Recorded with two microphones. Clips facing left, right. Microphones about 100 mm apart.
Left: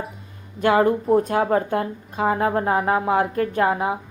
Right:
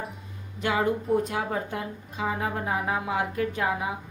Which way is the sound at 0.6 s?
55° left (ahead or behind).